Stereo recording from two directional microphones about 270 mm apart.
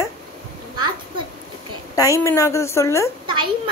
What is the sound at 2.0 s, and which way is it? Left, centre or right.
Speech, centre.